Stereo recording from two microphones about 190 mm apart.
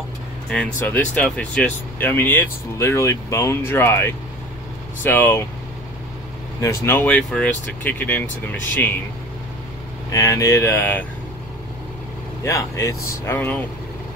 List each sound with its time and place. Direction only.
0.5 s speech: 5° left (ahead or behind)
6.6 s speech: 15° left (ahead or behind)
10.0 s speech: 15° left (ahead or behind)
12.4 s speech: 15° left (ahead or behind)